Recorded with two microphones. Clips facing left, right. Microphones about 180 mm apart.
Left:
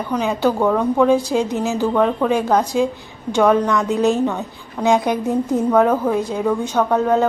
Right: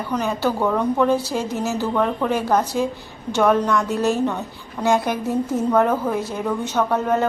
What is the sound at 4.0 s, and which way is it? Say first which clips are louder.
A woman's voice: left 3 dB; 15° left (ahead or behind).